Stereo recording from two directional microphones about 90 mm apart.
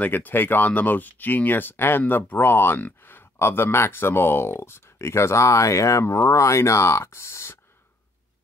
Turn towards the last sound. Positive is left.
turn(degrees=30)  # may be behind; listen again after turning